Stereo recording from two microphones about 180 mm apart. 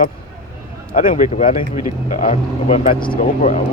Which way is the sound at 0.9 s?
45° left (ahead or behind).